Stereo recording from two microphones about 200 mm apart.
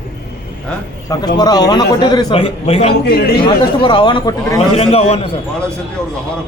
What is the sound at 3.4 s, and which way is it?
A man's voice, 25° left (ahead or behind).